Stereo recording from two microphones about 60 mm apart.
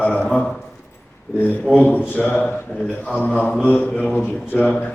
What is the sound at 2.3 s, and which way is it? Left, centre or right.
Speech, left.